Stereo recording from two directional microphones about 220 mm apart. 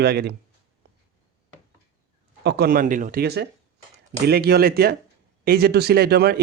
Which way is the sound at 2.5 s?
45° right (ahead or behind).